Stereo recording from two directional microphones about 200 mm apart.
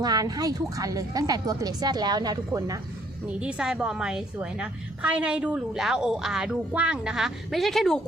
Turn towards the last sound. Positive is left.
turn(degrees=0)  # may be behind; listen again after turning